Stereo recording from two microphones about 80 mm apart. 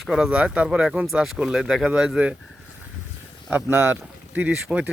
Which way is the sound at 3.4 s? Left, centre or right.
Right.